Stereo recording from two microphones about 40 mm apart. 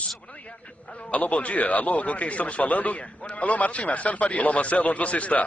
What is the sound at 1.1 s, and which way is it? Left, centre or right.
A man's voice, left.